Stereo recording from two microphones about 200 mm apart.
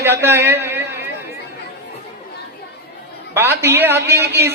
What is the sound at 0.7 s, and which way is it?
Chatter, 10° right (ahead or behind).